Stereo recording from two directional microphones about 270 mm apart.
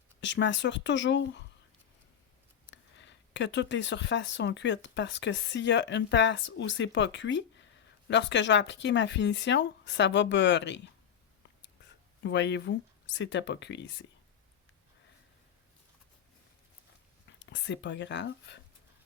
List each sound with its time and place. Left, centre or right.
0.2 s speech: left
2.6 s speech: left
12.2 s speech: left
17.4 s speech: left